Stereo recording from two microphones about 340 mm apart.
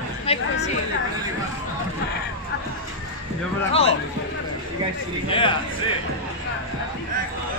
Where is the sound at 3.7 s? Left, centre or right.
Centre.